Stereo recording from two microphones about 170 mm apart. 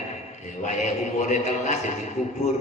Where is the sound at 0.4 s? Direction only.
45° left (ahead or behind).